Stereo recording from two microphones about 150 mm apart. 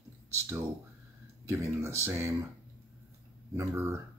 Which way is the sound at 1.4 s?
20° right (ahead or behind).